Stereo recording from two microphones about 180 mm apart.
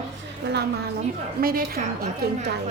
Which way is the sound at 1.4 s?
55° right (ahead or behind).